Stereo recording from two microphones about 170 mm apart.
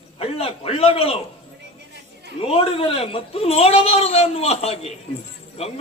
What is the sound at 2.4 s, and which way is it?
Speech, 35° left (ahead or behind).